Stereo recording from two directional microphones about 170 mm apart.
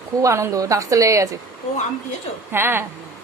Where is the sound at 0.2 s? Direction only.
15° right (ahead or behind).